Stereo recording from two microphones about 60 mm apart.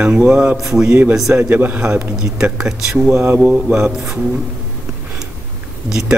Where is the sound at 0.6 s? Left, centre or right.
Centre.